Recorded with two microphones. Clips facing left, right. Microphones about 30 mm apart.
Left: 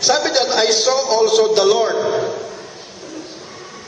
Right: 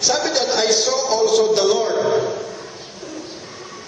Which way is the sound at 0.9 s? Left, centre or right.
Left.